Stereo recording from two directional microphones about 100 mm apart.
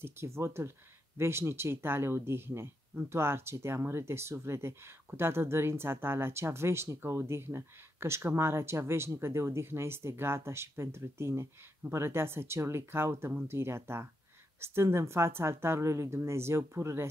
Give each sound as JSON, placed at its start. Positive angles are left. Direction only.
{"t": 0.0, "sound": "speech", "side_deg": -25}